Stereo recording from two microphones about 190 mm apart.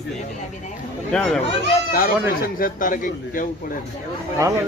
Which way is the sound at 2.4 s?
45° left (ahead or behind).